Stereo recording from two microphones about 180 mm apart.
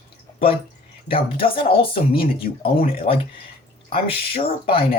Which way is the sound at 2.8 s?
50° left (ahead or behind).